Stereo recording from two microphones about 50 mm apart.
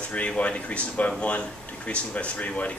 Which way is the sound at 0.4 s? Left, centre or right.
Left.